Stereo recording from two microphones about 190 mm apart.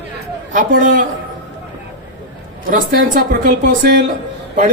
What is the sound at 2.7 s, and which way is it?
Speech, 50° right (ahead or behind).